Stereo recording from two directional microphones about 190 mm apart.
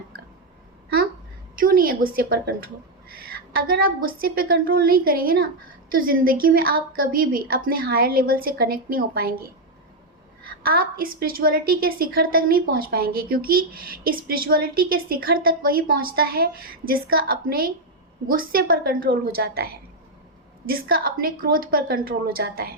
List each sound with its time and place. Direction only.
1.5 s a woman's voice: 50° right (ahead or behind)
10.6 s a woman's voice: 50° right (ahead or behind)